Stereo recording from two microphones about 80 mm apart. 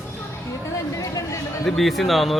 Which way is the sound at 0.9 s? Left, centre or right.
Left.